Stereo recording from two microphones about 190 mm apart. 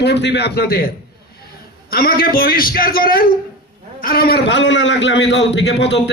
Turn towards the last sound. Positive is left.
turn(degrees=70)  # may be behind; listen again after turning